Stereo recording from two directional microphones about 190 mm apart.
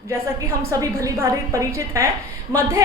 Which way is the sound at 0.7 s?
15° right (ahead or behind).